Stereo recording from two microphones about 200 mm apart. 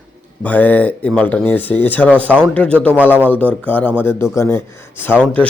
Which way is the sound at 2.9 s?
10° right (ahead or behind).